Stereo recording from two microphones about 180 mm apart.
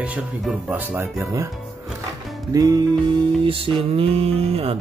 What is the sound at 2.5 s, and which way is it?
Music, 20° right (ahead or behind).